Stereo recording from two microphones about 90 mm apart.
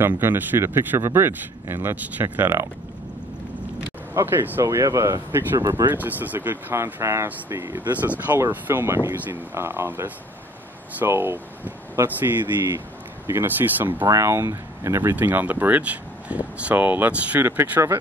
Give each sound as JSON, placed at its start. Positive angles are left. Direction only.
{"t": 0.0, "sound": "speech", "side_deg": -25}
{"t": 4.1, "sound": "speech", "side_deg": -30}
{"t": 4.6, "sound": "speech", "side_deg": -35}
{"t": 14.0, "sound": "speech", "side_deg": -35}
{"t": 15.1, "sound": "speech", "side_deg": -20}
{"t": 17.5, "sound": "speech", "side_deg": -25}